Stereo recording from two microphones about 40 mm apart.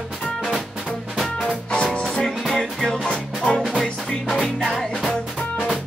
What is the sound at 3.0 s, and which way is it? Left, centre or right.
Music, left.